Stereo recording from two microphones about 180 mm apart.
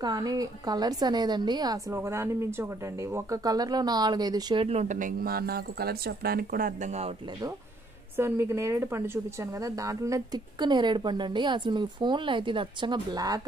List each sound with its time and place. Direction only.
0.0 s a woman's voice: 20° right (ahead or behind)
4.6 s speech: 40° right (ahead or behind)
8.2 s a woman's voice: 15° right (ahead or behind)